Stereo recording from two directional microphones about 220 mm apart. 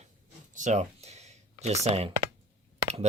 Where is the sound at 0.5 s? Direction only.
35° right (ahead or behind).